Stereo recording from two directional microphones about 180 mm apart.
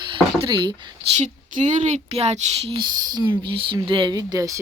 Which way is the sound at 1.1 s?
40° right (ahead or behind).